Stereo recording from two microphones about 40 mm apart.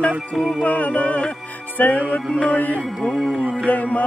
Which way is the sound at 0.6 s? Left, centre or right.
Left.